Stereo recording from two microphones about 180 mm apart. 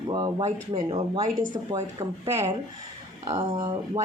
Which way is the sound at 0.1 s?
25° right (ahead or behind).